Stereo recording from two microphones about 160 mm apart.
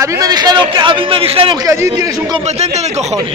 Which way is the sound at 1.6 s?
20° right (ahead or behind).